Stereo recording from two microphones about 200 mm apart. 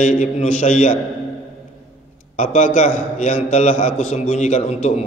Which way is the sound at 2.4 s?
40° left (ahead or behind).